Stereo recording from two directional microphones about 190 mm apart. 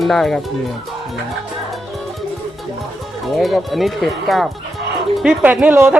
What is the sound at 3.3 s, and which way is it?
Speech, centre (ahead or behind).